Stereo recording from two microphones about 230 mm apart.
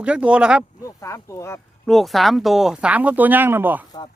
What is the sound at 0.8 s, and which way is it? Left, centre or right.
Speech, centre.